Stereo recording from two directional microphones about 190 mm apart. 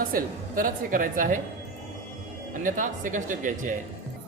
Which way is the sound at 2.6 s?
45° right (ahead or behind).